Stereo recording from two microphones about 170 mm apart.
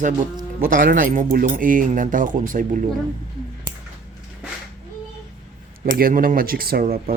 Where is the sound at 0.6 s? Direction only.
50° right (ahead or behind).